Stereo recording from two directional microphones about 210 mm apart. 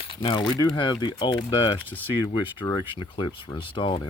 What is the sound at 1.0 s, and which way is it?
Speech, 20° left (ahead or behind).